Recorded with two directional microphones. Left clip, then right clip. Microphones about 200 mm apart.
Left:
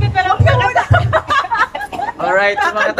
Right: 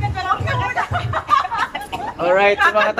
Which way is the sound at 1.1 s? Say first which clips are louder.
Left 9 dB; 50° left (ahead or behind).